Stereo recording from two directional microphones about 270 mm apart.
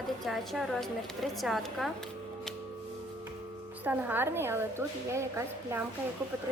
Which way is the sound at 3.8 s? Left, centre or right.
Centre.